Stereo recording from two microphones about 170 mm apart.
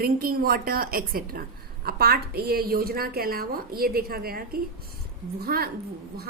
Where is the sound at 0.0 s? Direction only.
60° right (ahead or behind).